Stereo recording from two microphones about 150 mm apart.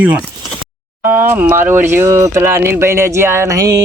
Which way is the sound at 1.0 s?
15° right (ahead or behind).